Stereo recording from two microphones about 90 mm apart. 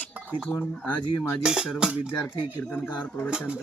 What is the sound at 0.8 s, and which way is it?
Speech, 25° left (ahead or behind).